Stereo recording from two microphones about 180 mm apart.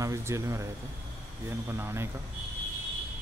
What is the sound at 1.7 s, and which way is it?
Speech, 15° right (ahead or behind).